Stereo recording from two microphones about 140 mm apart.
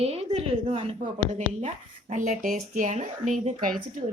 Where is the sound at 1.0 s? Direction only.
55° right (ahead or behind).